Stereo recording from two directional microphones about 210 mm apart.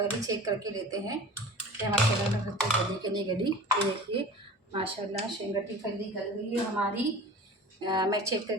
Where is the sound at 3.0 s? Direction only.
20° right (ahead or behind).